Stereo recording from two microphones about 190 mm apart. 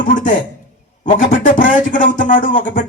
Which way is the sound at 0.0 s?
45° left (ahead or behind).